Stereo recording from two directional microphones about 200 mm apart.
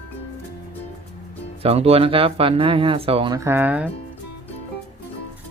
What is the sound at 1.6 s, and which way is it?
Speech, 30° right (ahead or behind).